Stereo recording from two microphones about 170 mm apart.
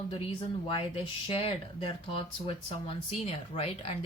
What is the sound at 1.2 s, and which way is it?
Speech, 30° left (ahead or behind).